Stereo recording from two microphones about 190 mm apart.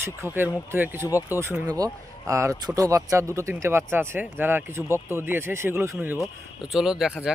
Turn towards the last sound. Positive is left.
turn(degrees=-5)  # may be behind; listen again after turning